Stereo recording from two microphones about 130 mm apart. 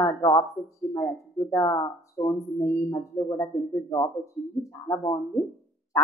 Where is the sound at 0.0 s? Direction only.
25° left (ahead or behind).